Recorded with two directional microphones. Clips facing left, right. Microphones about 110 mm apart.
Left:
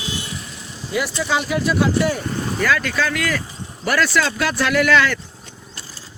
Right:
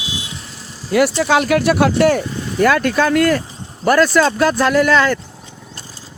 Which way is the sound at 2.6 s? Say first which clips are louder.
Right 8 dB; 50° right (ahead or behind).